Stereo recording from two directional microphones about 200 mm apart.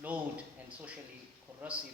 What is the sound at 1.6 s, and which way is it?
Speech, 10° right (ahead or behind).